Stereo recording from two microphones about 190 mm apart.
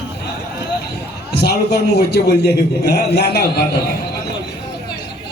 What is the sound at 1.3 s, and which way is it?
A man's voice, 60° left (ahead or behind).